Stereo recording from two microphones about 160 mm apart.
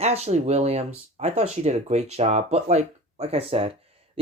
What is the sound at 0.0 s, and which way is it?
Speech, 40° right (ahead or behind).